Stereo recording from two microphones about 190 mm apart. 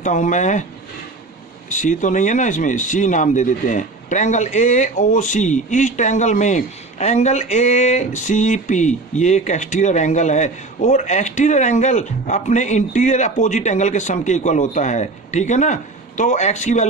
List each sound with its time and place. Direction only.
0.0 s speech: 40° left (ahead or behind)
1.7 s speech: 40° left (ahead or behind)